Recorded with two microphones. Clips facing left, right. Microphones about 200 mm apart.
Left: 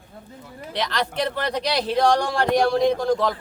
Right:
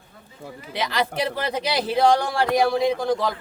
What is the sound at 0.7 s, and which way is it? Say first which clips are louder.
Speech: right 1 dB; 5° right (ahead or behind).